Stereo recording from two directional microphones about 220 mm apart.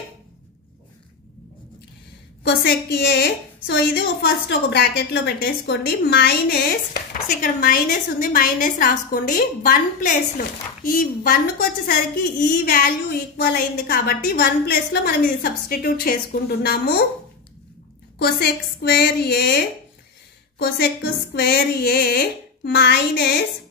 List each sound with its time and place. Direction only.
2.4 s a woman's voice: 50° left (ahead or behind)
18.2 s speech: 50° left (ahead or behind)